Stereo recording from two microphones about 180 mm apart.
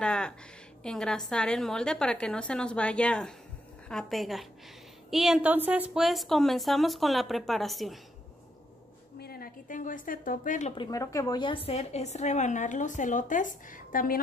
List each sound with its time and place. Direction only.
0.0 s a sound: 5° left (ahead or behind)
0.8 s a woman's voice: 5° left (ahead or behind)
9.2 s a woman's voice: 55° left (ahead or behind)
10.7 s a woman's voice: 25° left (ahead or behind); by 14.1 s 50° left (ahead or behind)